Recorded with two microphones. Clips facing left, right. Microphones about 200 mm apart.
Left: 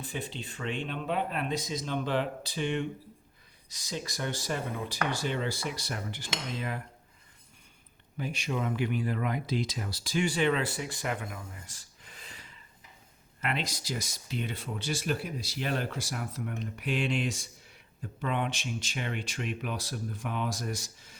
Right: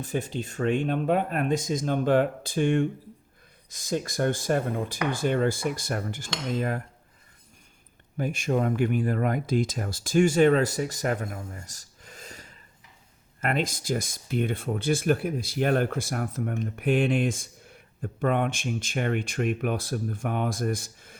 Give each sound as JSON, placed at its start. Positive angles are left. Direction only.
{"t": 0.0, "sound": "speech", "side_deg": -45}
{"t": 8.2, "sound": "speech", "side_deg": -50}